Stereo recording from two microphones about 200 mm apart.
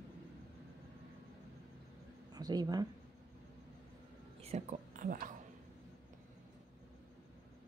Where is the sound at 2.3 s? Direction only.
20° right (ahead or behind).